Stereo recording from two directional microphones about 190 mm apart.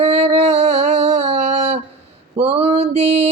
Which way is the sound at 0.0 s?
35° right (ahead or behind).